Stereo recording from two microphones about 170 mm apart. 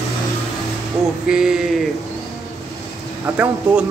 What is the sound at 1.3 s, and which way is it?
Speech, 5° right (ahead or behind).